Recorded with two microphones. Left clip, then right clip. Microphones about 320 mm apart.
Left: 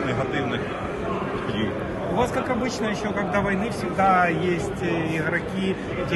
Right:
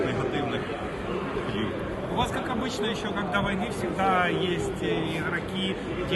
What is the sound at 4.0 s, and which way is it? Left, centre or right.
Speech, centre.